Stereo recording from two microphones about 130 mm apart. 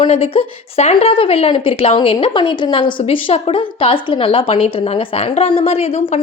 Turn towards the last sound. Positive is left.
turn(degrees=50)  # may be behind; listen again after turning